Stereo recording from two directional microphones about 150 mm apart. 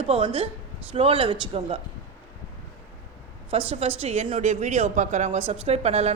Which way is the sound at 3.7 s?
40° right (ahead or behind).